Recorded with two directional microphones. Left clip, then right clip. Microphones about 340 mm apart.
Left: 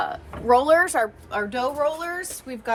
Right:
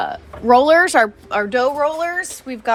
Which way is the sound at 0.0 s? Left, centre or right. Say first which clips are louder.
Right 5 dB; centre.